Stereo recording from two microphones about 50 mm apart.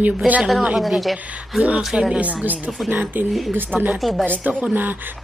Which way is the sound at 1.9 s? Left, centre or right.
Right.